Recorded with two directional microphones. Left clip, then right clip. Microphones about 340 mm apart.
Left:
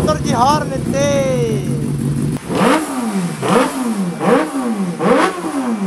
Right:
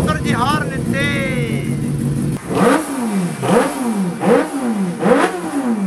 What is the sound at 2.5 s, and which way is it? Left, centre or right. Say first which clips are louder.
Vehicle: even; centre.